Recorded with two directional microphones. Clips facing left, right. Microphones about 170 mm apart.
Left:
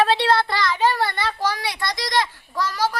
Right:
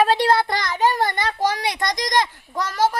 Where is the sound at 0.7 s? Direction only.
15° right (ahead or behind).